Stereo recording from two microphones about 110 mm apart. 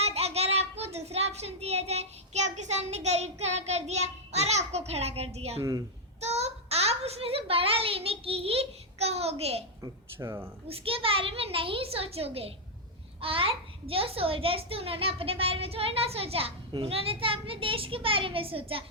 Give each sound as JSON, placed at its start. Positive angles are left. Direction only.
{"t": 0.0, "sound": "child singing", "side_deg": -70}
{"t": 6.1, "sound": "a child's voice", "side_deg": -80}
{"t": 9.8, "sound": "speech", "side_deg": -25}
{"t": 10.7, "sound": "a child's voice", "side_deg": -55}